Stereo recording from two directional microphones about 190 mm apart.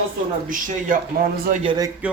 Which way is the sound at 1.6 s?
20° right (ahead or behind).